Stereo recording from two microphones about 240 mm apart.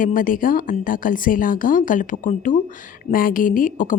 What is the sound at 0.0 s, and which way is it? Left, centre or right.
A woman's voice, left.